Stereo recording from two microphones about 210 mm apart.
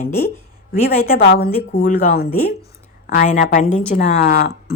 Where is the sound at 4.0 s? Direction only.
40° left (ahead or behind).